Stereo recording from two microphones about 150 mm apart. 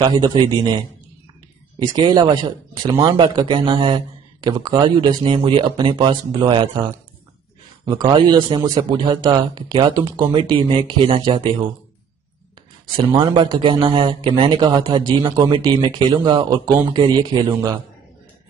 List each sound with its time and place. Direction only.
0.0 s a man's voice: 30° right (ahead or behind)
1.8 s speech: 25° right (ahead or behind)
12.9 s speech: 30° right (ahead or behind)